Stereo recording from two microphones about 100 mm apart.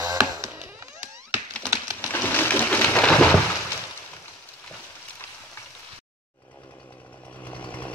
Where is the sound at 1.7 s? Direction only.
25° right (ahead or behind).